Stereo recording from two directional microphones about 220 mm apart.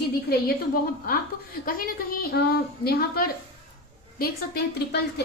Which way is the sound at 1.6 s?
40° left (ahead or behind).